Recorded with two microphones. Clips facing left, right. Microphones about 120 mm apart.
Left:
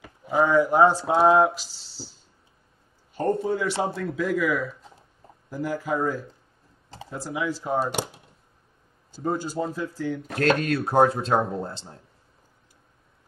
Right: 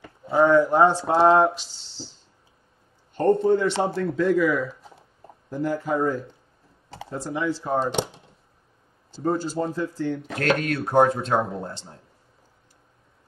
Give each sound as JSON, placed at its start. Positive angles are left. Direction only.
{"t": 0.0, "sound": "speech", "side_deg": 15}
{"t": 3.2, "sound": "speech", "side_deg": 5}
{"t": 10.4, "sound": "speech", "side_deg": 30}